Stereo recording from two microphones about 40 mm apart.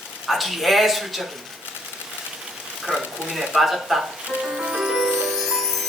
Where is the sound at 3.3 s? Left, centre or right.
Centre.